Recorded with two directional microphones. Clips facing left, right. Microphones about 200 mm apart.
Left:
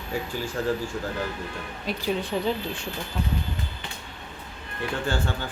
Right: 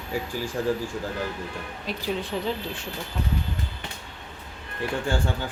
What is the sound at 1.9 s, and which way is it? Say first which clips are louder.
Speech: left 2 dB; centre (ahead or behind).